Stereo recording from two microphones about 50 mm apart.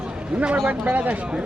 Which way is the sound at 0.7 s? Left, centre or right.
Right.